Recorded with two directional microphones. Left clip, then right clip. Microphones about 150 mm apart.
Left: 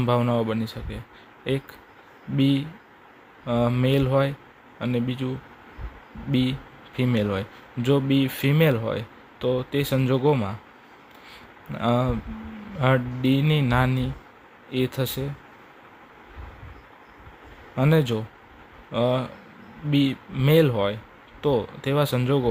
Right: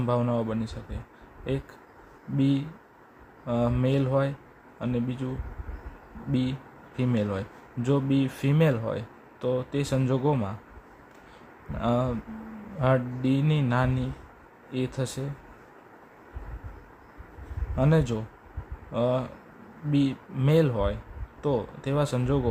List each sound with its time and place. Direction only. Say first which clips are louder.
0.0 s speech: left 4 dB; 20° left (ahead or behind)
11.7 s speech: left 3 dB; 20° left (ahead or behind)
17.7 s speech: left 3 dB; 20° left (ahead or behind)